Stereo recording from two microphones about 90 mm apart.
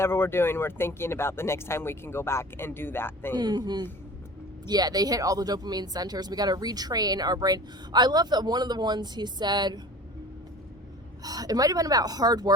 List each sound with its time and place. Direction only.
0.0 s speech: 25° left (ahead or behind)
3.3 s speech: 50° right (ahead or behind)
11.2 s speech: 45° right (ahead or behind)